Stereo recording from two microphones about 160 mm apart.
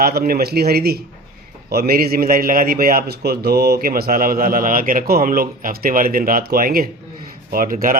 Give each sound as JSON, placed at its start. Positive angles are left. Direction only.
{"t": 0.0, "sound": "a man's voice", "side_deg": -70}